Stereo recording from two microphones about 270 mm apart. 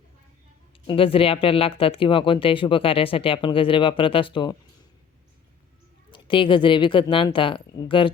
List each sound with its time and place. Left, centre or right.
0.9 s speech: centre
6.1 s a woman's voice: centre